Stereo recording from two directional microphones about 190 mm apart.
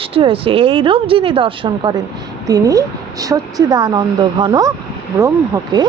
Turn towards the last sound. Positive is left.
turn(degrees=-20)  # may be behind; listen again after turning